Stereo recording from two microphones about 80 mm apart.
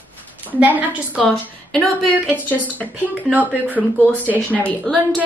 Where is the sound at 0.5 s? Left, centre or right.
Centre.